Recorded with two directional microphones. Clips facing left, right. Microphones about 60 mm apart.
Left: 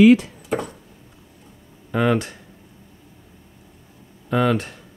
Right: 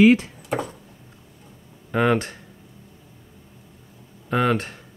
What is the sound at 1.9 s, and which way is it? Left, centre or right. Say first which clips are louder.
Speech: even; right.